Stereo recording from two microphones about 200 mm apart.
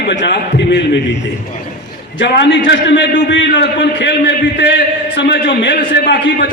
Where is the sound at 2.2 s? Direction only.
60° left (ahead or behind).